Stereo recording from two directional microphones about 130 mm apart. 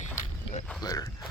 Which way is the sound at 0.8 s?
30° left (ahead or behind).